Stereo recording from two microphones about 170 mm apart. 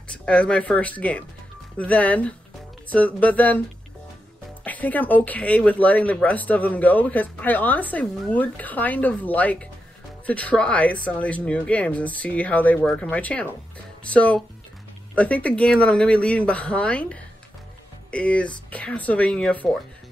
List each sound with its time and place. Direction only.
0.1 s speech: 5° left (ahead or behind)
4.6 s speech: 10° left (ahead or behind)